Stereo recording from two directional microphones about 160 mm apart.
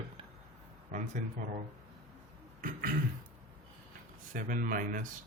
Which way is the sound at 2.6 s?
55° right (ahead or behind).